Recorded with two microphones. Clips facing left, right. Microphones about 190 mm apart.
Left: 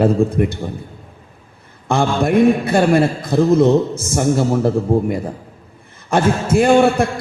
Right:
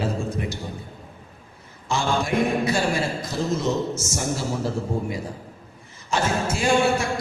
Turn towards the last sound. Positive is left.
turn(degrees=55)  # may be behind; listen again after turning